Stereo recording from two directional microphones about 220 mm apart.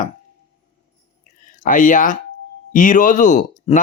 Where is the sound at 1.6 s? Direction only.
35° left (ahead or behind).